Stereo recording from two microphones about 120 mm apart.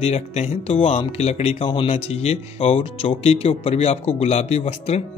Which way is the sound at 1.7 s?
50° left (ahead or behind).